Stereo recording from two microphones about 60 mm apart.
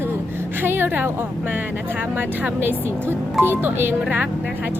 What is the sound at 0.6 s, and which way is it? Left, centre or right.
A woman's voice, right.